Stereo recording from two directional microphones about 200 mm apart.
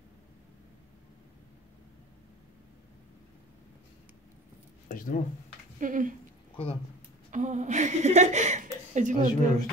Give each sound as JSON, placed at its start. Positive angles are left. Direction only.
{"t": 4.8, "sound": "a sound", "side_deg": 45}
{"t": 5.8, "sound": "speech", "side_deg": -40}
{"t": 6.5, "sound": "speech", "side_deg": 30}
{"t": 7.2, "sound": "speech", "side_deg": -35}